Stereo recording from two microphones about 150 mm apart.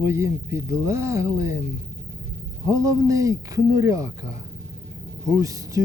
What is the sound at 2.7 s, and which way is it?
Speech, 20° right (ahead or behind).